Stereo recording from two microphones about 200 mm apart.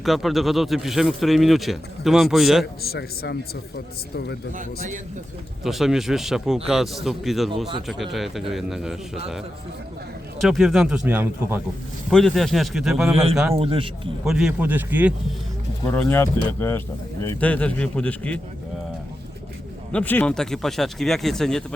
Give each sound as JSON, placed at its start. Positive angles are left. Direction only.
{"t": 0.0, "sound": "speech", "side_deg": 0}
{"t": 2.8, "sound": "a man's voice", "side_deg": 50}
{"t": 4.5, "sound": "a man's voice", "side_deg": -40}
{"t": 5.6, "sound": "speech", "side_deg": 0}
{"t": 10.4, "sound": "speech", "side_deg": 0}
{"t": 12.1, "sound": "speech", "side_deg": 0}
{"t": 13.5, "sound": "a man's voice", "side_deg": -30}
{"t": 14.3, "sound": "speech", "side_deg": -5}
{"t": 15.9, "sound": "speech", "side_deg": 10}
{"t": 19.9, "sound": "speech", "side_deg": 5}